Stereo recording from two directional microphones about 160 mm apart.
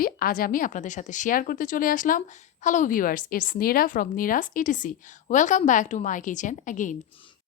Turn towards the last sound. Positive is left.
turn(degrees=55)  # may be behind; listen again after turning